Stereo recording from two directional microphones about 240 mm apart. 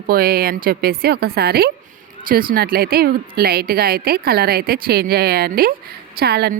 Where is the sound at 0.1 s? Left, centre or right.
Right.